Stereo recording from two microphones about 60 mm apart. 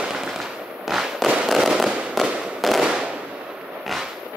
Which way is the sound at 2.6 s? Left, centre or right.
Centre.